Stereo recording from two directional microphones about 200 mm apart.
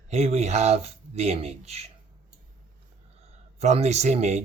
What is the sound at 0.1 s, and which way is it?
Speech, 30° right (ahead or behind).